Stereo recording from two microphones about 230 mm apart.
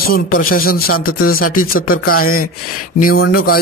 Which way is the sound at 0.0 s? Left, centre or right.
Left.